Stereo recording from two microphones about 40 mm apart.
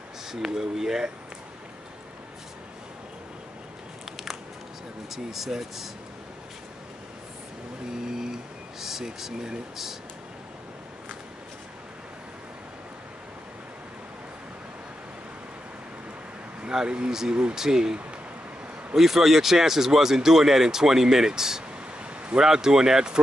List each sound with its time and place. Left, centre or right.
0.3 s speech: centre
5.1 s speech: centre
8.1 s speech: centre
16.6 s speech: right
18.9 s speech: centre